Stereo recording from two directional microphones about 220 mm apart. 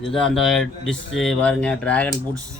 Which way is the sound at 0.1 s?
Centre (ahead or behind).